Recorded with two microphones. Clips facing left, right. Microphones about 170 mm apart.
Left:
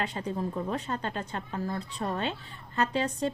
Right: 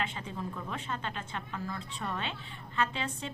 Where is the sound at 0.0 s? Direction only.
40° left (ahead or behind).